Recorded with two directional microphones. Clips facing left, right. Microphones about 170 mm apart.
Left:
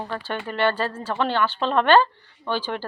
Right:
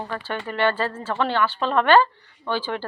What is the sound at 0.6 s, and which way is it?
A woman's voice, 15° left (ahead or behind).